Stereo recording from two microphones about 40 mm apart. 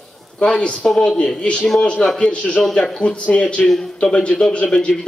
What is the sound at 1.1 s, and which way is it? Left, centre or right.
A man's voice, left.